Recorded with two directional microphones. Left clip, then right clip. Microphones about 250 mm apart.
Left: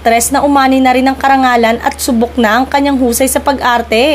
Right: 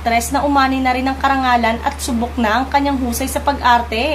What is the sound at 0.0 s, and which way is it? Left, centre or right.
A woman's voice, left.